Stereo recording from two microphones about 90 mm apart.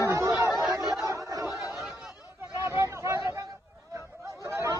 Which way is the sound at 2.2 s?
30° right (ahead or behind).